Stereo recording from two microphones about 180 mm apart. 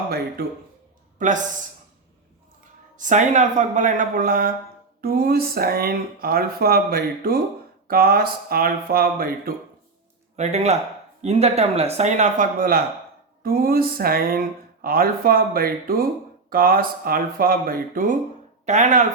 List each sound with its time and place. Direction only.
1.2 s speech: 45° right (ahead or behind)
3.0 s speech: 45° right (ahead or behind)
10.3 s speech: 35° right (ahead or behind)